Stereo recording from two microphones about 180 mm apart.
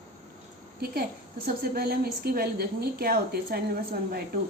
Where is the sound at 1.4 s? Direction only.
55° right (ahead or behind).